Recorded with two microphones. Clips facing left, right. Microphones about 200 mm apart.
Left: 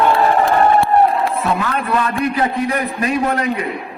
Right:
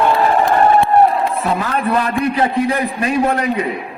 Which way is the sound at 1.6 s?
35° right (ahead or behind).